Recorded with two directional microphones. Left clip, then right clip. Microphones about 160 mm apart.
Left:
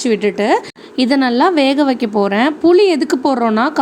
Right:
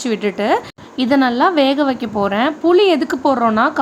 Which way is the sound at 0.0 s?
20° left (ahead or behind).